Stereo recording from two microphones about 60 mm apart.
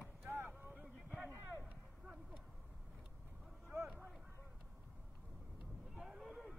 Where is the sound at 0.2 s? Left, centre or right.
Right.